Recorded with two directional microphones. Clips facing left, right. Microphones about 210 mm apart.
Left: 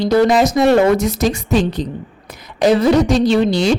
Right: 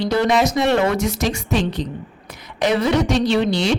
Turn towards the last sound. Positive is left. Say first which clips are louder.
# left 4 dB
turn(degrees=40)  # may be behind; listen again after turning